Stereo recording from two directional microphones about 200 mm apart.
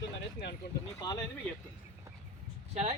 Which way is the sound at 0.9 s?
20° left (ahead or behind).